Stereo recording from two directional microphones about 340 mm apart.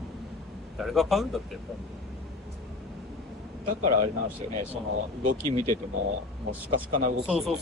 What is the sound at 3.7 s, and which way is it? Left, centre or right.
Speech, right.